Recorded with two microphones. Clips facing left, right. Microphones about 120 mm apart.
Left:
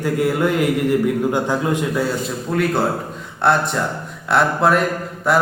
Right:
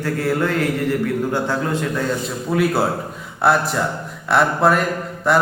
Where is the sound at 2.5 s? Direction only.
5° right (ahead or behind).